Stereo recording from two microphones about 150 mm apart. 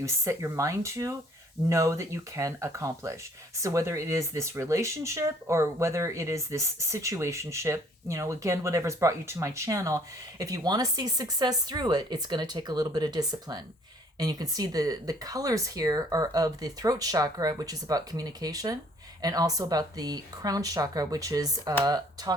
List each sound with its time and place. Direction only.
0.0 s speech: 20° right (ahead or behind)